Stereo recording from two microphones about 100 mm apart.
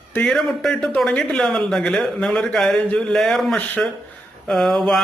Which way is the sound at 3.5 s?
15° left (ahead or behind).